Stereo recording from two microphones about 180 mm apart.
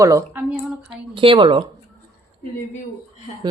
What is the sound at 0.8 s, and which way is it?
Speech, 30° right (ahead or behind).